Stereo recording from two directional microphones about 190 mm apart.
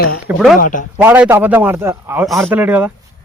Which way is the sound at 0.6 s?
45° left (ahead or behind).